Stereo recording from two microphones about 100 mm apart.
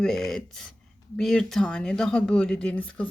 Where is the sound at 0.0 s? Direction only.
5° left (ahead or behind).